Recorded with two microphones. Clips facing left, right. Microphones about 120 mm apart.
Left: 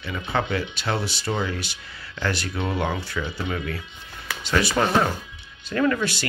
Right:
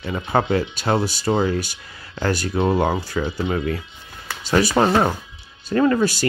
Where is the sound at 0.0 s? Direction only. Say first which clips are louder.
Right 5 dB; 40° right (ahead or behind).